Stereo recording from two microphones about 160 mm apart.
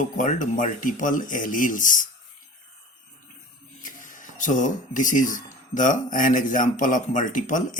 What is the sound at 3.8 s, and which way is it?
Speech, 55° left (ahead or behind).